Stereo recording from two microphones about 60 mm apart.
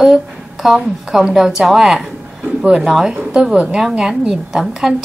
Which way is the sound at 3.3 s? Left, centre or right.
Centre.